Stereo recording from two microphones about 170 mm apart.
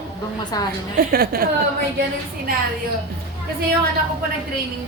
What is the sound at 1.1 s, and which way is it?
Speech, 60° right (ahead or behind).